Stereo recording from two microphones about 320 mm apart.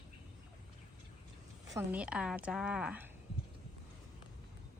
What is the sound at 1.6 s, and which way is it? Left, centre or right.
A woman's voice, centre.